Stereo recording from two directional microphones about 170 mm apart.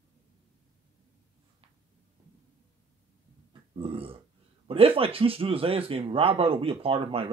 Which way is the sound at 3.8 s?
35° right (ahead or behind).